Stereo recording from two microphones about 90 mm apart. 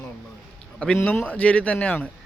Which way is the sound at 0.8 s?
15° left (ahead or behind).